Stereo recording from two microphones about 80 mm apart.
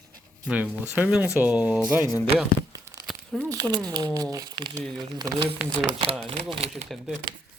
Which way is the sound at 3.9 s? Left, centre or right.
Right.